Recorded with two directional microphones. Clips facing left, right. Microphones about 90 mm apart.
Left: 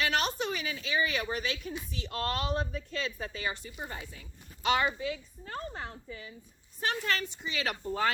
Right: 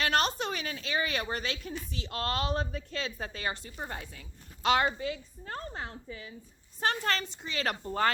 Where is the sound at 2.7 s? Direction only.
55° right (ahead or behind).